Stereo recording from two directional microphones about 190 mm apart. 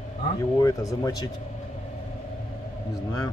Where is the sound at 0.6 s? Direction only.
20° left (ahead or behind).